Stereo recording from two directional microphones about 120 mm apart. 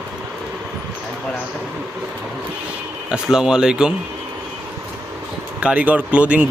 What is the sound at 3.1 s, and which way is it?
Speech, 5° right (ahead or behind).